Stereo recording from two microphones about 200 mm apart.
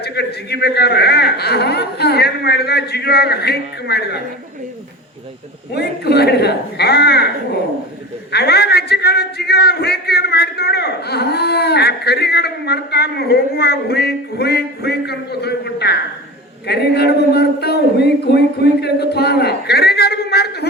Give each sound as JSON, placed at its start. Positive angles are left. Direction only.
{"t": 0.0, "sound": "a man's voice", "side_deg": 55}
{"t": 5.7, "sound": "a man's voice", "side_deg": 55}
{"t": 8.3, "sound": "a man's voice", "side_deg": 55}